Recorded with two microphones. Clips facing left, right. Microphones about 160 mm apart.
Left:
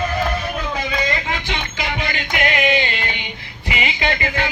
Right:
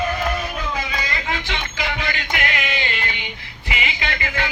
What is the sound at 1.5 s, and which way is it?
Music, 20° left (ahead or behind).